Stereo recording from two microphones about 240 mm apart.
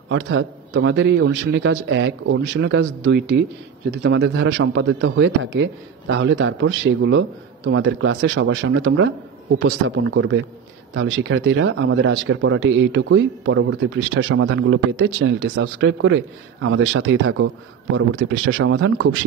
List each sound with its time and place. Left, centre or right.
0.1 s a man's voice: right